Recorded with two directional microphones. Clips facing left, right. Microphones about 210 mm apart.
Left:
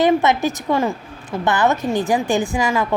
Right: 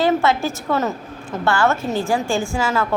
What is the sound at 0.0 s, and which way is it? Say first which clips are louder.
A woman's voice: left 2 dB; 20° left (ahead or behind).